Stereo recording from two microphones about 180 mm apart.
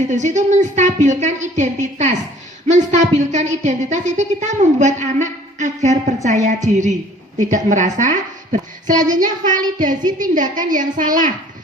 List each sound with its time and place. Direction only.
0.1 s a woman's voice: 40° right (ahead or behind)